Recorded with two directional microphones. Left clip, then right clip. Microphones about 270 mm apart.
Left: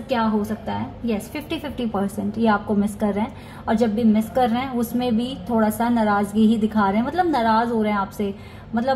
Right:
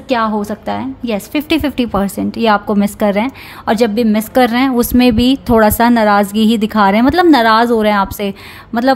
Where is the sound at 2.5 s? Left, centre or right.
Right.